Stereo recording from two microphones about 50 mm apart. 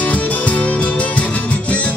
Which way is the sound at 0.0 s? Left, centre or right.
Left.